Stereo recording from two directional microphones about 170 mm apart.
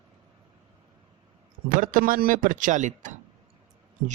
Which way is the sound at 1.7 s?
55° right (ahead or behind).